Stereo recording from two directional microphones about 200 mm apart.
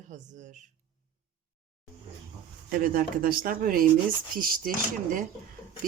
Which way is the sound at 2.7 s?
45° right (ahead or behind).